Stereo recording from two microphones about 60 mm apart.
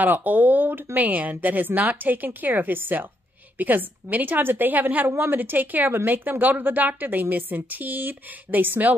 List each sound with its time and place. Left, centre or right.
0.0 s a woman's voice: right